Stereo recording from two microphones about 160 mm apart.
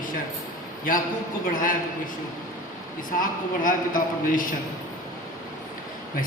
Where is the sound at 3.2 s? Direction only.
60° left (ahead or behind).